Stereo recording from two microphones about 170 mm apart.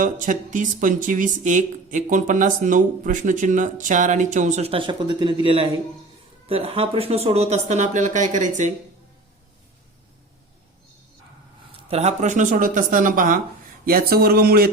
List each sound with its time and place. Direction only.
0.0 s speech: 50° right (ahead or behind)
11.9 s speech: 40° right (ahead or behind); by 14.7 s 60° right (ahead or behind)